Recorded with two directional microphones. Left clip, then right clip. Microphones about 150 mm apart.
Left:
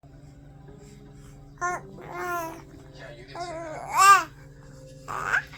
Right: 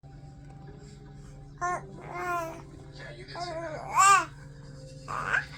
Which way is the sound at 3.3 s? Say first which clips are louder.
Left 1 dB; 25° left (ahead or behind).